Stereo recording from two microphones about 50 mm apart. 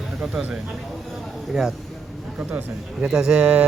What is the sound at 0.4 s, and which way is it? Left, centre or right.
Speech, centre.